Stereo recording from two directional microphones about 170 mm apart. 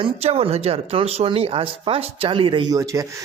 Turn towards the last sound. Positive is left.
turn(degrees=-20)  # may be behind; listen again after turning